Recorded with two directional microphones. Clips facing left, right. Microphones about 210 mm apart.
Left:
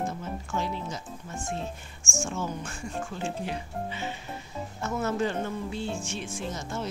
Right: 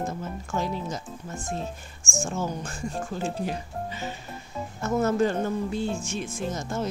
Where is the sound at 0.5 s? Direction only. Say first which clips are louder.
Right 3 dB; 40° right (ahead or behind).